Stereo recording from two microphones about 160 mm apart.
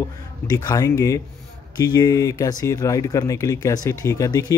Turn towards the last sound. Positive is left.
turn(degrees=20)  # may be behind; listen again after turning